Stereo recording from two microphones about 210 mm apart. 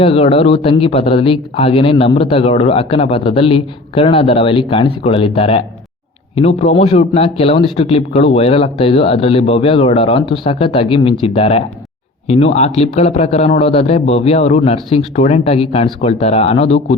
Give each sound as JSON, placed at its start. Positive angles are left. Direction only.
{"t": 0.0, "sound": "a man's voice", "side_deg": 30}